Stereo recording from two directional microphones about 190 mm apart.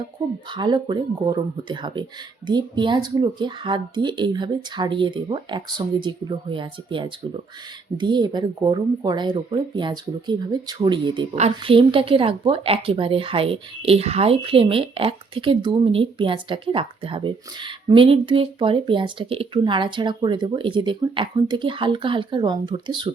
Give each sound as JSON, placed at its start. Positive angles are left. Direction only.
{"t": 0.5, "sound": "speech", "side_deg": -25}